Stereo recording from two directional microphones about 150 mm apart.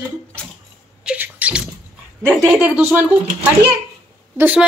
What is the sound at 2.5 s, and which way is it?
Speech, 10° right (ahead or behind).